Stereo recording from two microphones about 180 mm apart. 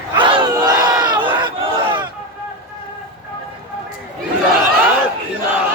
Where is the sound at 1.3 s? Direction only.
25° right (ahead or behind).